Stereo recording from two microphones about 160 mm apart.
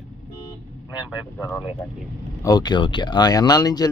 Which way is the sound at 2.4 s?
25° left (ahead or behind).